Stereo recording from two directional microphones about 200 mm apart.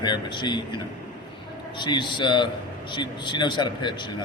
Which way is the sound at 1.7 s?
25° left (ahead or behind).